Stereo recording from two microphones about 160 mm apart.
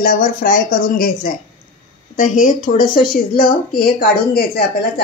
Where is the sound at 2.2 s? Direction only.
55° left (ahead or behind); by 4.6 s 70° left (ahead or behind).